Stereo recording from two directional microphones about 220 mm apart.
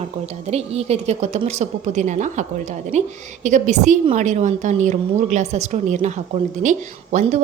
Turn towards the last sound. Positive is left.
turn(degrees=-35)  # may be behind; listen again after turning